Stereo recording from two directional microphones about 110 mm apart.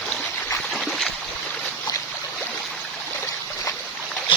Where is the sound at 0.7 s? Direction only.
5° left (ahead or behind).